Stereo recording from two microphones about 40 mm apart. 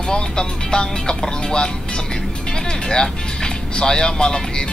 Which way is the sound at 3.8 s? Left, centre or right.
Centre.